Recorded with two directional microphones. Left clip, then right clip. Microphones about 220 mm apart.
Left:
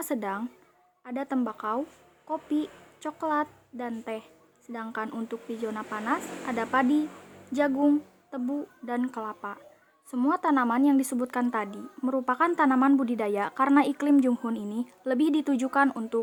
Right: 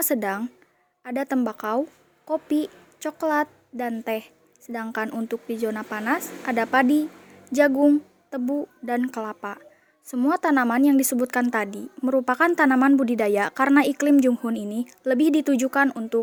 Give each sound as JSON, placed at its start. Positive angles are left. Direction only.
{"t": 0.0, "sound": "speech", "side_deg": -15}